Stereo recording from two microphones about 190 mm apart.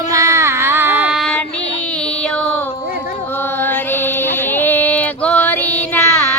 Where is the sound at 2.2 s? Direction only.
5° left (ahead or behind).